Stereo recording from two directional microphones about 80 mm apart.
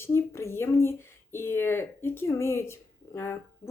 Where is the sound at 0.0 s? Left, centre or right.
Left.